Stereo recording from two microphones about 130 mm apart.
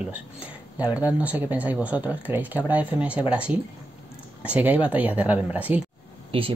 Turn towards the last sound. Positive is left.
turn(degrees=-45)  # may be behind; listen again after turning